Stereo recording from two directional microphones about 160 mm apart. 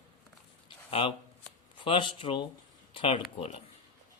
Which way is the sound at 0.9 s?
35° left (ahead or behind).